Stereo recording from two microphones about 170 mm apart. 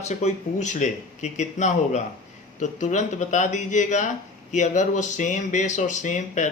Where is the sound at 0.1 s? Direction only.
40° left (ahead or behind).